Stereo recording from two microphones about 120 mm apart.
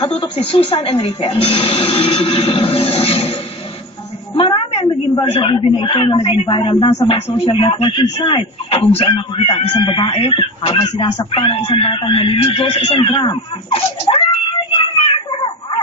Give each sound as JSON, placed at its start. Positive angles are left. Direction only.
{"t": 0.0, "sound": "speech", "side_deg": 50}
{"t": 4.4, "sound": "a sound", "side_deg": 45}
{"t": 5.3, "sound": "speech", "side_deg": 45}
{"t": 7.2, "sound": "speech", "side_deg": 55}